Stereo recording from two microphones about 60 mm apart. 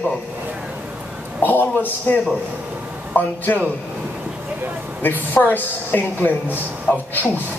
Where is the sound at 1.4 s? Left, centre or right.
Left.